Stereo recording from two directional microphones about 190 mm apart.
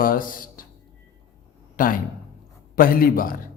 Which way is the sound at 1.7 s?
45° left (ahead or behind).